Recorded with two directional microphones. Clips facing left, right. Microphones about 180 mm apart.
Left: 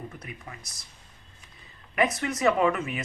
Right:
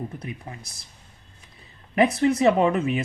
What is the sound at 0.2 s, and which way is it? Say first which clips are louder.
Speech: right 6 dB; 30° right (ahead or behind).